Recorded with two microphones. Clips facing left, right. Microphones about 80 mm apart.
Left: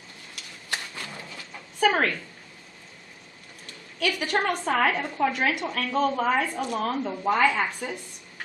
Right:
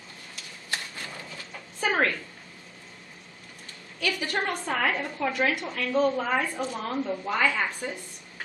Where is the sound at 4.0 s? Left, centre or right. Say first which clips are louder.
Left 3 dB; left.